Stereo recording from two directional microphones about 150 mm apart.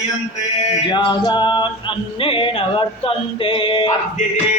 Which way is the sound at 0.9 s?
30° left (ahead or behind).